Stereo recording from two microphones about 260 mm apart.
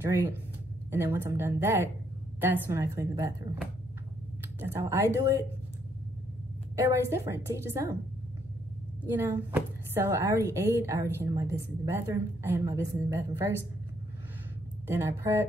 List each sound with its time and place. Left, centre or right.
0.0 s a woman's voice: centre
6.8 s a woman's voice: centre
9.1 s a woman's voice: centre
14.9 s a woman's voice: centre